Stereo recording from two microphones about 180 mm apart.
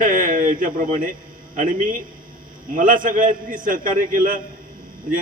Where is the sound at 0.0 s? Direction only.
45° right (ahead or behind).